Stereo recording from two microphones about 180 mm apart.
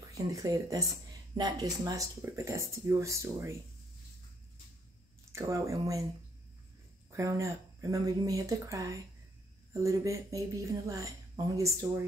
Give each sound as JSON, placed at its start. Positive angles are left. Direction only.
{"t": 0.1, "sound": "speech", "side_deg": -20}
{"t": 5.3, "sound": "speech", "side_deg": -15}
{"t": 7.1, "sound": "speech", "side_deg": -15}